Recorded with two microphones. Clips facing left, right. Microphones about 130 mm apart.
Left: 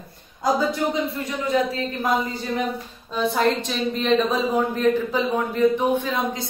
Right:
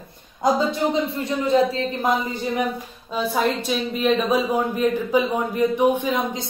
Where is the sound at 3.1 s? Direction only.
5° right (ahead or behind).